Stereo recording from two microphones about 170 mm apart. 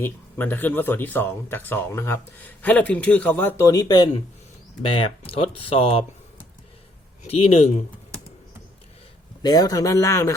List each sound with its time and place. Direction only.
0.0 s speech: 10° left (ahead or behind); by 6.1 s 35° left (ahead or behind)
7.3 s speech: 35° left (ahead or behind)
9.4 s speech: 25° left (ahead or behind)